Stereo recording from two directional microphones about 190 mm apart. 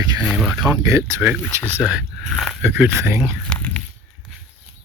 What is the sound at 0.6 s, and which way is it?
Speech, 15° right (ahead or behind).